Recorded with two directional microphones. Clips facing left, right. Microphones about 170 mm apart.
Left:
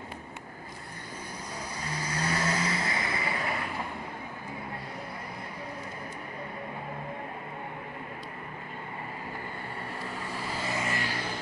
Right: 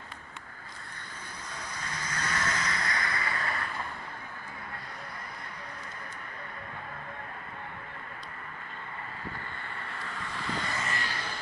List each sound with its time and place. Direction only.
1.8 s vehicle: 10° left (ahead or behind)
2.2 s vehicle: 30° left (ahead or behind); by 3.8 s 15° left (ahead or behind)
10.0 s vehicle: 10° left (ahead or behind)